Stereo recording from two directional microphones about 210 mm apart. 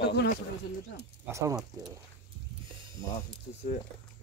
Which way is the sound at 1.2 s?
15° right (ahead or behind).